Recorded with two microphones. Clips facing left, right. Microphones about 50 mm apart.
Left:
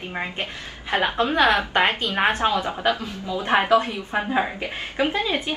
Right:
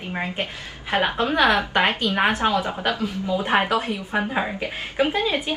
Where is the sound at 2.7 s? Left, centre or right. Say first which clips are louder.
Left 1 dB; left.